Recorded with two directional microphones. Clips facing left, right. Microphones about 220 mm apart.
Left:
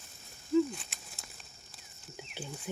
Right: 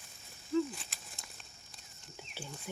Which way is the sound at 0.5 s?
Centre (ahead or behind).